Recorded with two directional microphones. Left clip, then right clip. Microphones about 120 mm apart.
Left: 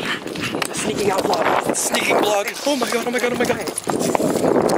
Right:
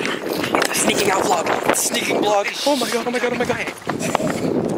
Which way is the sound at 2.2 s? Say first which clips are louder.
Right 1 dB; 10° left (ahead or behind).